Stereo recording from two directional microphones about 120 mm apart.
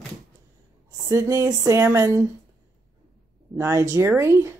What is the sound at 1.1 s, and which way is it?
Speech, 25° right (ahead or behind).